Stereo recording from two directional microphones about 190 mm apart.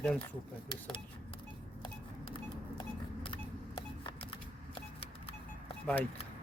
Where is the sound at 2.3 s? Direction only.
25° left (ahead or behind).